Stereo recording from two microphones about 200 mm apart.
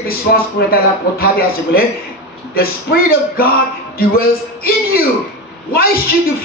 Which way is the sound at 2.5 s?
50° left (ahead or behind).